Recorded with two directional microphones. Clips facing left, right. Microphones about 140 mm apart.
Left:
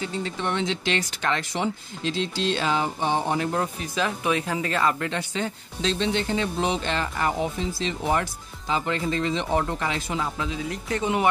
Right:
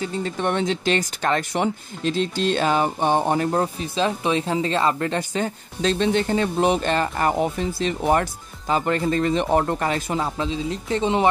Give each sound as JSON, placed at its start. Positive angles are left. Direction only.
{"t": 0.0, "sound": "speech", "side_deg": -45}
{"t": 3.5, "sound": "speech", "side_deg": -30}
{"t": 10.2, "sound": "speech", "side_deg": -30}